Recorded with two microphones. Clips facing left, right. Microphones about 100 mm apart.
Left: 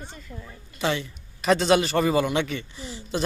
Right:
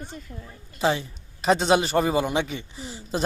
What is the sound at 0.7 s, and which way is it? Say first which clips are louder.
A man's voice: right 3 dB; 30° right (ahead or behind).